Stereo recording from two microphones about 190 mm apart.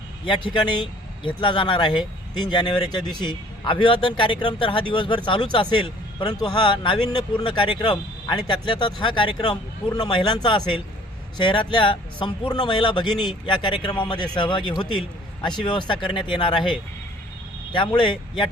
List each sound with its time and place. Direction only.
0.3 s speech: 25° left (ahead or behind)
17.7 s speech: 25° left (ahead or behind)